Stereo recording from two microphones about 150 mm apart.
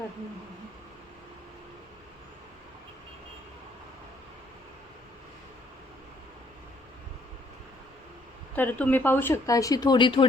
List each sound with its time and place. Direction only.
8.5 s speech: 10° left (ahead or behind); by 10.2 s 35° left (ahead or behind)